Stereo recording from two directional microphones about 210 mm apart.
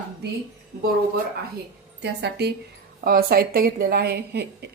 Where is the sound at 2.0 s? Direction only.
50° right (ahead or behind).